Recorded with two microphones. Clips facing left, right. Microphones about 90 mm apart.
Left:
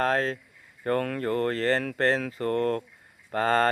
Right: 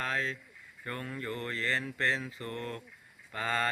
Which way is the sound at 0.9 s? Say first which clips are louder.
Left 12 dB; 60° left (ahead or behind).